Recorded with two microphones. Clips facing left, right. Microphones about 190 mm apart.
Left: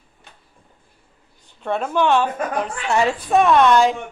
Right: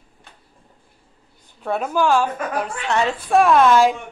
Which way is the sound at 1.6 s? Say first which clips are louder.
Even; 5° right (ahead or behind).